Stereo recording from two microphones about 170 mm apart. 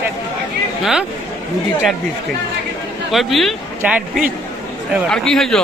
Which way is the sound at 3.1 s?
Centre (ahead or behind).